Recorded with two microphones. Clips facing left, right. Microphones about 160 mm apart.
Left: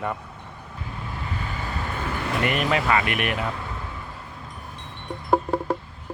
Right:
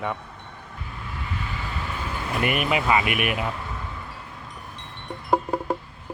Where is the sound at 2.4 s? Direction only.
15° right (ahead or behind).